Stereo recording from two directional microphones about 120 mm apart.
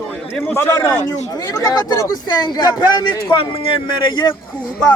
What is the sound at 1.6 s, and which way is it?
Speech, 30° left (ahead or behind).